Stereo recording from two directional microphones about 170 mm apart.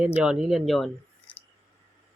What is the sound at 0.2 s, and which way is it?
Speech, 5° right (ahead or behind).